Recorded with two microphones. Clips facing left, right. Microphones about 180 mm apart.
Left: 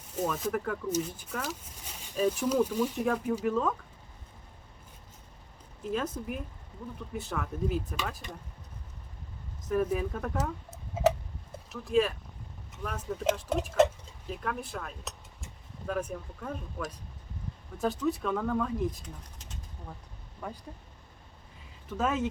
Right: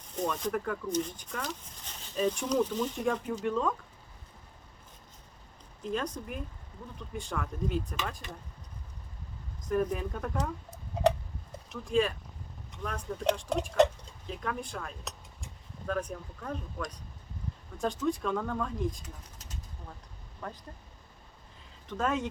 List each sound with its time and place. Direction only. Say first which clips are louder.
0.2 s speech: left 1 dB; 5° left (ahead or behind)
5.8 s speech: left 1 dB; 5° left (ahead or behind)
9.6 s speech: left 1 dB; 5° left (ahead or behind)
20.4 s speech: left 1 dB; 10° left (ahead or behind)
21.8 s speech: left 1 dB; 5° left (ahead or behind)